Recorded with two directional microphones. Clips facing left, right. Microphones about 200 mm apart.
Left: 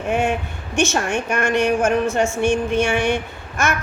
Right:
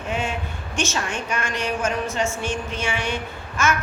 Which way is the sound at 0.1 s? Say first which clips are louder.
Left 7 dB; 60° left (ahead or behind).